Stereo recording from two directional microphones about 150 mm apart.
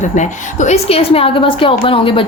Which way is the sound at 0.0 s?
55° left (ahead or behind).